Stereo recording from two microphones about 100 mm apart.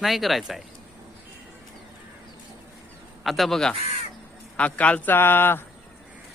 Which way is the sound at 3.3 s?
Centre (ahead or behind).